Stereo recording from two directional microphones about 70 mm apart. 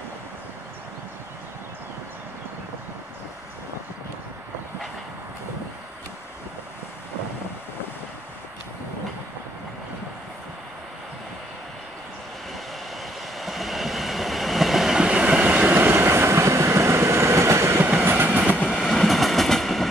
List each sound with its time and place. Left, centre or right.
13.4 s train: centre; by 18.6 s right
18.8 s train: centre